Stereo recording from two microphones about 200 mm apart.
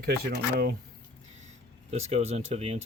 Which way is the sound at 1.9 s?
30° right (ahead or behind).